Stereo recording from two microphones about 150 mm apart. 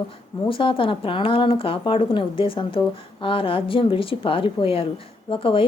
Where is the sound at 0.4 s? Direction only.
35° left (ahead or behind).